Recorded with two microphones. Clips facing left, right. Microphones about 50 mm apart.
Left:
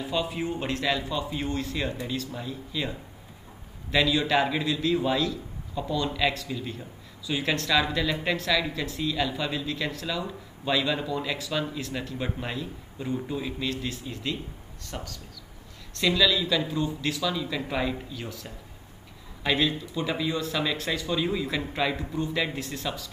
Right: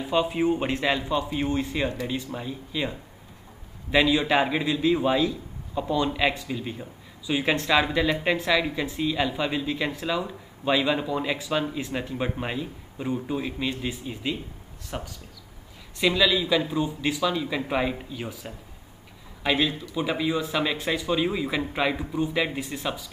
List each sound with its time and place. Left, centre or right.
0.1 s a man's voice: right
3.9 s a man's voice: right
19.4 s speech: centre